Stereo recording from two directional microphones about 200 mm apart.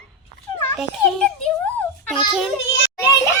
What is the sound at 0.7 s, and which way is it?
Speech, centre (ahead or behind).